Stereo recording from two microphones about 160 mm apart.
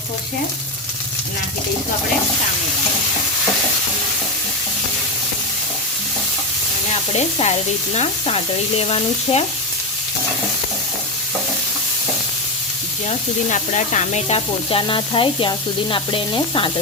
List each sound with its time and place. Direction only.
7.1 s sizzle: 40° left (ahead or behind)
8.8 s sizzle: 40° left (ahead or behind)
13.1 s sizzle: 50° left (ahead or behind); by 16.7 s 30° left (ahead or behind)